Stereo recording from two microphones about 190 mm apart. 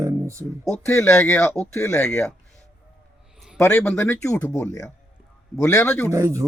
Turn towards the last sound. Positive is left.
turn(degrees=-15)  # may be behind; listen again after turning